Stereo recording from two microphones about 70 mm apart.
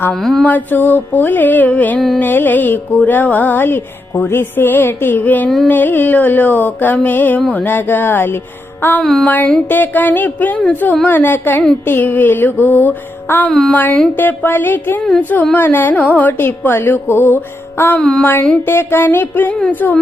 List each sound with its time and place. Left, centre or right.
0.1 s mantra: centre
0.4 s music: left
9.2 s music: left